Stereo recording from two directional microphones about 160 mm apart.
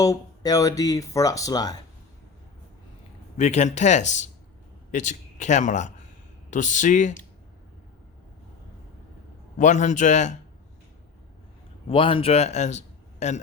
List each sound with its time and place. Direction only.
0.0 s speech: 20° left (ahead or behind)
3.3 s a man's voice: 45° left (ahead or behind)
9.6 s speech: 50° left (ahead or behind)
11.9 s a man's voice: 35° left (ahead or behind)